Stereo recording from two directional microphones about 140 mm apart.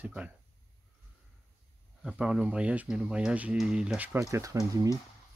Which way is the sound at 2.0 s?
5° right (ahead or behind).